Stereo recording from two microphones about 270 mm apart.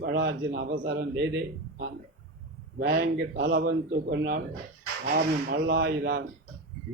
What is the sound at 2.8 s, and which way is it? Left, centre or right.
A man's voice, right.